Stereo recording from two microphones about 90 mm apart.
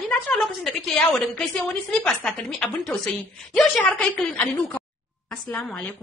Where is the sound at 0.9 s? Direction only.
15° left (ahead or behind).